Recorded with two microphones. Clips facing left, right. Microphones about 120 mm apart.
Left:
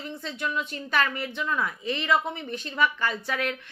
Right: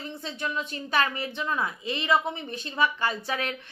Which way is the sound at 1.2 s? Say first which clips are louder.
Left 1 dB; 30° right (ahead or behind).